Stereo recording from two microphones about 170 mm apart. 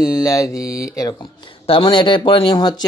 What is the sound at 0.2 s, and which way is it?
Mantra, 20° left (ahead or behind).